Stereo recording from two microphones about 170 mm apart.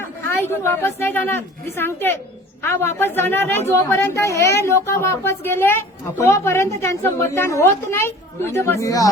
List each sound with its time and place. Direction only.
0.0 s a woman's voice: 15° left (ahead or behind)